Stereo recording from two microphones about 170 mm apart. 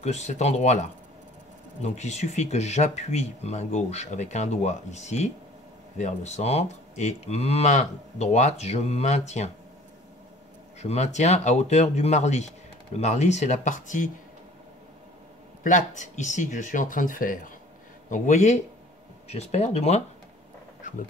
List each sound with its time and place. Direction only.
0.0 s speech: 40° left (ahead or behind)
10.8 s speech: 40° left (ahead or behind)
15.6 s speech: 45° left (ahead or behind)